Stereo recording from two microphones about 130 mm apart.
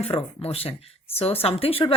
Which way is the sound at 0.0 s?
45° left (ahead or behind).